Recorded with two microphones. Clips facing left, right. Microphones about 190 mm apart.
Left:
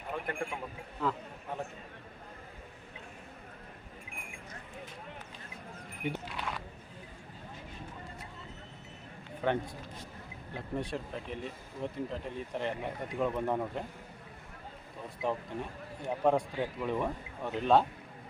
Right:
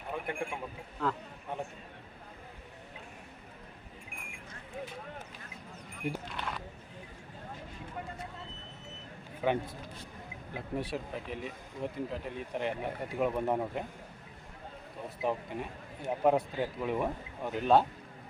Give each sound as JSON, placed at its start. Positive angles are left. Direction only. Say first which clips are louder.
{"t": 0.1, "sound": "speech", "louder": "even", "side_deg": -10}
{"t": 1.0, "sound": "a man's voice", "louder": "even", "side_deg": 5}
{"t": 6.0, "sound": "a sound", "louder": "even", "side_deg": 0}
{"t": 9.4, "sound": "a man's voice", "louder": "right 1 dB", "side_deg": -5}
{"t": 15.2, "sound": "a man's voice", "louder": "right 1 dB", "side_deg": -5}